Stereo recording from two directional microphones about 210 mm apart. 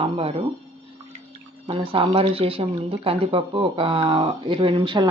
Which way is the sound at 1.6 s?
25° right (ahead or behind).